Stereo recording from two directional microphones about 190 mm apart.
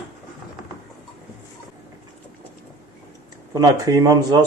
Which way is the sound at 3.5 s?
20° right (ahead or behind).